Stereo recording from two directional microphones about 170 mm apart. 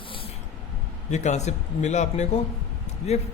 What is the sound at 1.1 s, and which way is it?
A man's voice, 45° left (ahead or behind).